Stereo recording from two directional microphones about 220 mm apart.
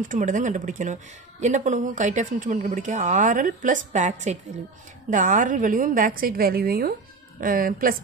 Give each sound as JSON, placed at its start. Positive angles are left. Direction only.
{"t": 0.0, "sound": "speech", "side_deg": -35}